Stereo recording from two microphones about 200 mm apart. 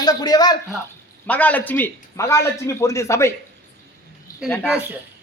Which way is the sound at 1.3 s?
10° left (ahead or behind).